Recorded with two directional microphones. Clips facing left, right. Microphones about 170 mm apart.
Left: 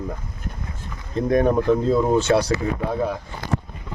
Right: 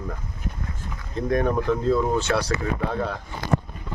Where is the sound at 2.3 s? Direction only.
25° left (ahead or behind).